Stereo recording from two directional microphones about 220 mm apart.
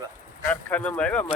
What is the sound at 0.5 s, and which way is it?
Speech, 5° left (ahead or behind).